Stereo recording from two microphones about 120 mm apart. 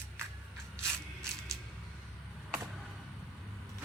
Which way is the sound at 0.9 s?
5° left (ahead or behind).